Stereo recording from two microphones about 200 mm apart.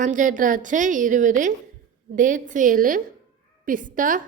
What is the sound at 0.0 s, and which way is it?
A woman's voice, 40° right (ahead or behind).